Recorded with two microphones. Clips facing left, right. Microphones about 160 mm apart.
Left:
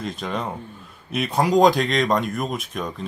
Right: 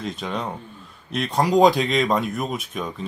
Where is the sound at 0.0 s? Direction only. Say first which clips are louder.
Even; centre (ahead or behind).